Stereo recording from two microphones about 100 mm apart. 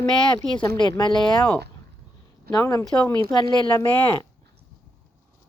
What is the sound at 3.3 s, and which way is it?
Speech, 45° left (ahead or behind).